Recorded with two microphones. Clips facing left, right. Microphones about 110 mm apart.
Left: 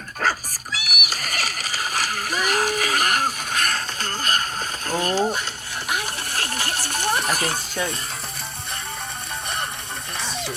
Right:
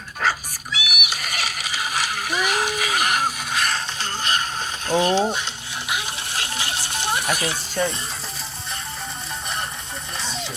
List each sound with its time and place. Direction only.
0.2 s music: 45° left (ahead or behind)
4.9 s mechanisms: 45° left (ahead or behind)
5.9 s a sound: 45° left (ahead or behind)
7.3 s mechanisms: 45° left (ahead or behind)